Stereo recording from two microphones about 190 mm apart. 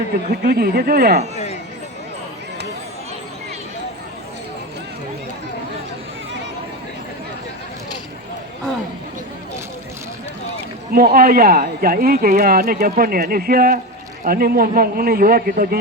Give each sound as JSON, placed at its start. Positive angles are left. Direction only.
{"t": 0.4, "sound": "speech", "side_deg": -55}
{"t": 10.9, "sound": "speech", "side_deg": -50}